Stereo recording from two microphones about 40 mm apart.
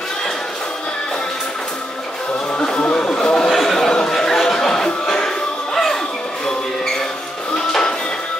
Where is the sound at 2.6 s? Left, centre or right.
Centre.